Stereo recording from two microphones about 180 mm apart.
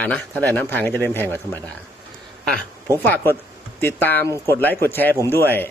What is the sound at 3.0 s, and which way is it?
Speech, 10° left (ahead or behind).